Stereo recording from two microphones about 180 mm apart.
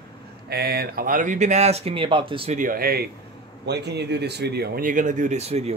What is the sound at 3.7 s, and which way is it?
Speech, 65° right (ahead or behind).